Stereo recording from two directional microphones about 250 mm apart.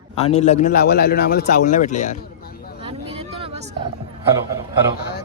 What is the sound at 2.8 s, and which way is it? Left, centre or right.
Vehicle, right.